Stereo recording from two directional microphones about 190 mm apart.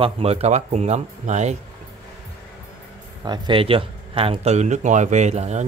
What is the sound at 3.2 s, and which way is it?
Speech, 25° right (ahead or behind).